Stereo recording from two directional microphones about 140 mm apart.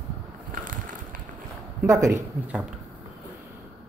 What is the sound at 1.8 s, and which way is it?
Speech, 20° right (ahead or behind).